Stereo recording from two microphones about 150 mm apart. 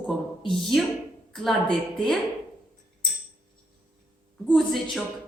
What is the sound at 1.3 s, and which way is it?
Speech, centre (ahead or behind).